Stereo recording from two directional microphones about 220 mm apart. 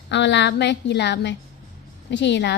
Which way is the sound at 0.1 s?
55° left (ahead or behind).